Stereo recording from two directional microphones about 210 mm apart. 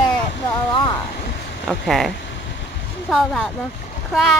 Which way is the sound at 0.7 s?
20° left (ahead or behind).